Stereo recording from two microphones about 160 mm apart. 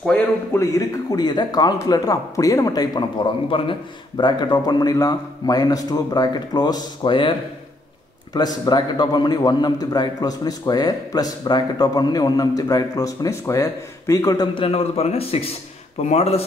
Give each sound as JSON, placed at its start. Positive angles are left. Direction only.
{"t": 0.0, "sound": "a man's voice", "side_deg": 10}